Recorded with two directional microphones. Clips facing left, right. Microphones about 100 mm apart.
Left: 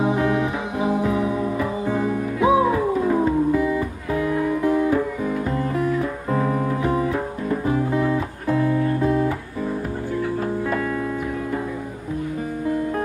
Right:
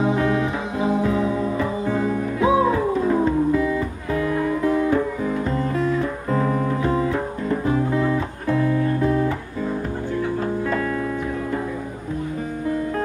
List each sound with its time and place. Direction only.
0.0 s music: 20° left (ahead or behind)